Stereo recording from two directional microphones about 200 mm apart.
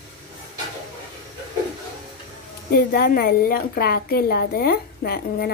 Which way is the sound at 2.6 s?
50° left (ahead or behind).